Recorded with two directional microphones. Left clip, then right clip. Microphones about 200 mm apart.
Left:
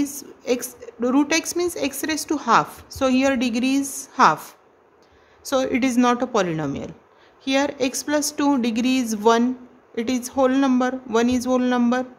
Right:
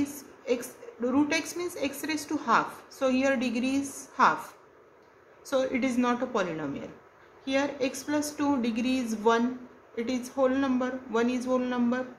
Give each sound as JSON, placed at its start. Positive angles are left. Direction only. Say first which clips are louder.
{"t": 0.0, "sound": "a woman's voice", "louder": "left 7 dB", "side_deg": 50}
{"t": 5.4, "sound": "a woman's voice", "louder": "left 6 dB", "side_deg": 50}